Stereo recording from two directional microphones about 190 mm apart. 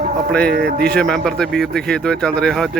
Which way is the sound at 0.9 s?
5° left (ahead or behind).